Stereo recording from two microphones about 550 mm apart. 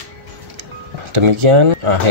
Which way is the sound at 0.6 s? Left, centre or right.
Right.